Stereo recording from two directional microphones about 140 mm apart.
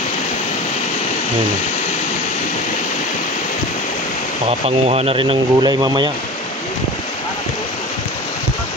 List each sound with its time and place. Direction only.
4.5 s speech: 45° right (ahead or behind)